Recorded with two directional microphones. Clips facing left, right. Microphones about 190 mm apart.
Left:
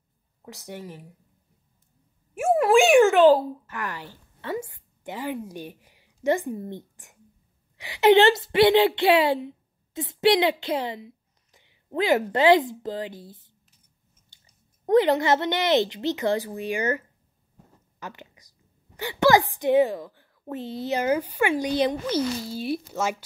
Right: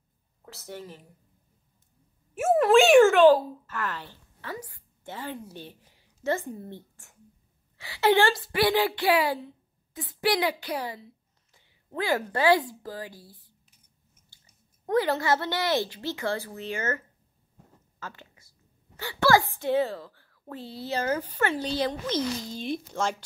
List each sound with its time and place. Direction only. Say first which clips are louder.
0.5 s a woman's voice: left 2 dB; 15° left (ahead or behind)
2.4 s a sound: left 1 dB; centre (ahead or behind)
2.9 s a child's voice: even; 20° left (ahead or behind)
4.4 s a woman's voice: left 7 dB; 25° left (ahead or behind)
14.9 s a woman's voice: left 5 dB; 20° left (ahead or behind)
17.9 s a sound: left 3 dB; 15° left (ahead or behind)
18.9 s a woman's voice: left 3 dB; 15° left (ahead or behind)